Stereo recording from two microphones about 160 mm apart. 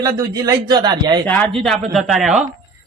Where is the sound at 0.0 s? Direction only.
20° right (ahead or behind).